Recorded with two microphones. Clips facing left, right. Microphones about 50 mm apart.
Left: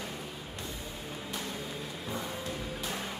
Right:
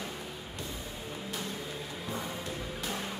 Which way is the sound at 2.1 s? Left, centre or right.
Centre.